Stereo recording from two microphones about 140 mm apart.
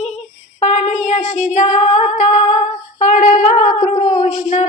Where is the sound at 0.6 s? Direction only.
55° left (ahead or behind).